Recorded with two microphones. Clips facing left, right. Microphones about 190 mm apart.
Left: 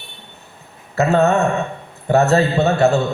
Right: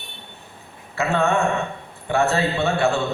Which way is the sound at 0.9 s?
40° left (ahead or behind).